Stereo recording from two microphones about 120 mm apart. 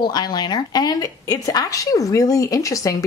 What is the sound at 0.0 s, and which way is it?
A woman's voice, 35° left (ahead or behind).